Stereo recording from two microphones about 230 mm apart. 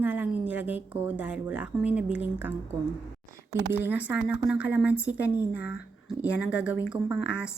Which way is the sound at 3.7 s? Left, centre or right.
Centre.